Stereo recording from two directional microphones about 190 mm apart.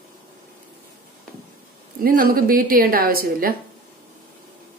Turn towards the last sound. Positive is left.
turn(degrees=-50)  # may be behind; listen again after turning